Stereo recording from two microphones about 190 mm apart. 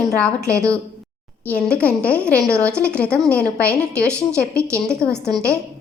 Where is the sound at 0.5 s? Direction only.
15° right (ahead or behind).